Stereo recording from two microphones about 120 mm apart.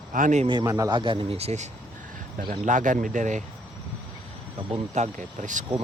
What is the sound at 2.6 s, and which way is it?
Speech, 90° right.